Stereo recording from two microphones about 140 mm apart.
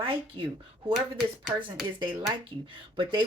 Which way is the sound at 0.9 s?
Centre (ahead or behind).